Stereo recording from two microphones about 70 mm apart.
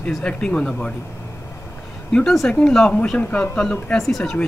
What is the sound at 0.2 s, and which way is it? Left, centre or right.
Speech, centre.